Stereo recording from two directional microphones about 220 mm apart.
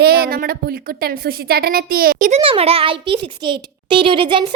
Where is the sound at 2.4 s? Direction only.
25° right (ahead or behind).